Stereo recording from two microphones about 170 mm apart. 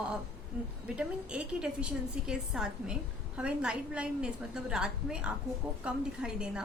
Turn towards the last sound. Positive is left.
turn(degrees=-5)  # may be behind; listen again after turning